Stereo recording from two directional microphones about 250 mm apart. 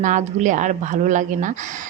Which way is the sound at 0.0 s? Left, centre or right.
Right.